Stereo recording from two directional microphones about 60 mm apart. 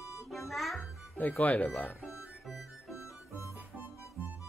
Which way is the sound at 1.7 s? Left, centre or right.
Left.